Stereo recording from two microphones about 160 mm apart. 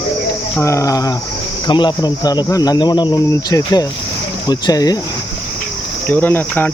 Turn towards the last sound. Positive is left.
turn(degrees=10)  # may be behind; listen again after turning